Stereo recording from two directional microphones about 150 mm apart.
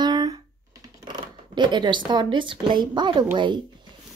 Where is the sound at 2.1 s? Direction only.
30° right (ahead or behind).